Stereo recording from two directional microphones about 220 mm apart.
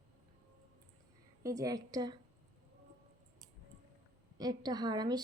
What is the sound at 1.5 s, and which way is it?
Speech, 15° right (ahead or behind).